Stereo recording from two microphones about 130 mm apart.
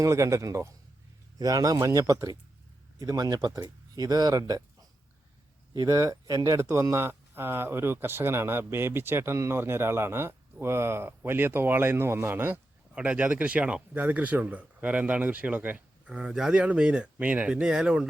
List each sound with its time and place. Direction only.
0.0 s speech: 25° right (ahead or behind); by 18.0 s 5° right (ahead or behind)